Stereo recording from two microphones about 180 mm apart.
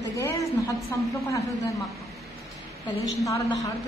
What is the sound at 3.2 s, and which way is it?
Speech, 15° left (ahead or behind).